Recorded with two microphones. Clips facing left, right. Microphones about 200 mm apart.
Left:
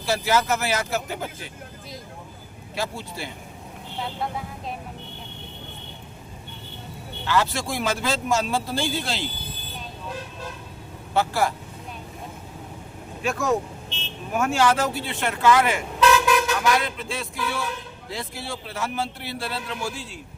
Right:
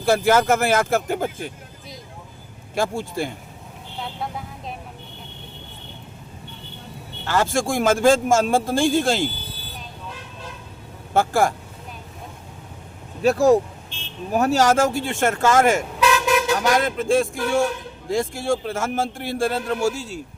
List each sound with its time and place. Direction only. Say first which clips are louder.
0.0 s speech: right 6 dB; 50° right (ahead or behind)
2.7 s speech: right 7 dB; 50° right (ahead or behind)
4.2 s speech: left 1 dB; centre (ahead or behind)
7.3 s speech: right 3 dB; 45° right (ahead or behind)
11.1 s speech: right 4 dB; 50° right (ahead or behind)
13.2 s speech: right 8 dB; 35° right (ahead or behind)